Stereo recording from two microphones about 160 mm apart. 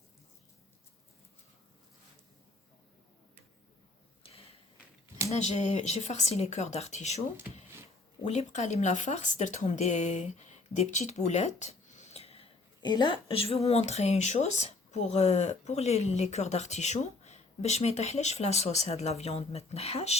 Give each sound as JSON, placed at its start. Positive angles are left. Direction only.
{"t": 4.2, "sound": "a sound", "side_deg": 35}
{"t": 5.3, "sound": "speech", "side_deg": 45}
{"t": 8.3, "sound": "speech", "side_deg": 45}
{"t": 12.8, "sound": "speech", "side_deg": 25}